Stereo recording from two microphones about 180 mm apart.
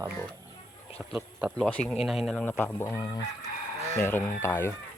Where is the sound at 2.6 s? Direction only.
10° left (ahead or behind).